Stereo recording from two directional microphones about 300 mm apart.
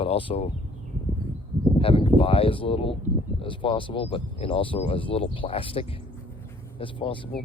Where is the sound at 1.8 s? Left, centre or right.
Centre.